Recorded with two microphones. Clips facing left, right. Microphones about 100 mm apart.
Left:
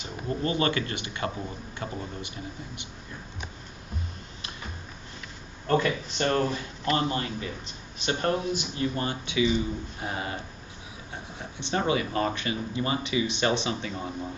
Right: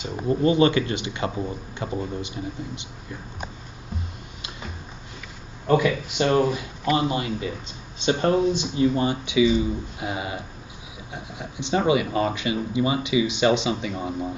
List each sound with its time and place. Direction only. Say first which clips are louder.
0.0 s speech: right 8 dB; 20° right (ahead or behind)
5.7 s speech: right 5 dB; 15° right (ahead or behind)